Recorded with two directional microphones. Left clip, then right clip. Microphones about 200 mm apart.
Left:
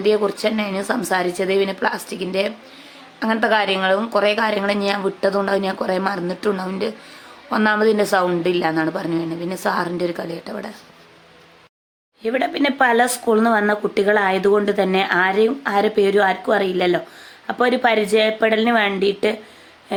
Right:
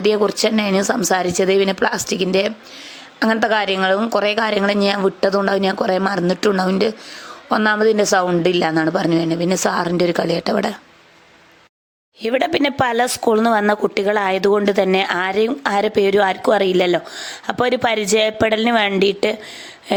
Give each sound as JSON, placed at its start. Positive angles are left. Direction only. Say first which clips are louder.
{"t": 0.0, "sound": "a woman's voice", "louder": "right 2 dB", "side_deg": -40}
{"t": 12.2, "sound": "speech", "louder": "right 2 dB", "side_deg": -45}